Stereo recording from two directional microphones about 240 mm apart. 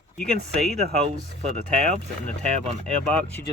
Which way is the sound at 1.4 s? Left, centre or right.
Right.